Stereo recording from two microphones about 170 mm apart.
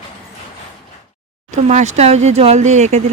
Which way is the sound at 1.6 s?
45° right (ahead or behind).